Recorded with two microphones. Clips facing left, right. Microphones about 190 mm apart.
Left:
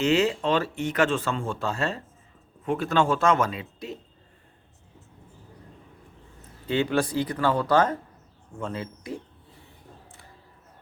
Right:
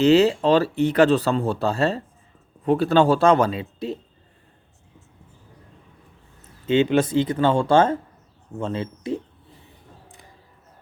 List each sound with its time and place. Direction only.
0.0 s speech: 35° right (ahead or behind)
6.7 s speech: 20° right (ahead or behind)